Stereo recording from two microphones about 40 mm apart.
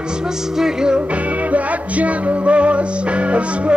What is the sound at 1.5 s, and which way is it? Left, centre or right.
Music, right.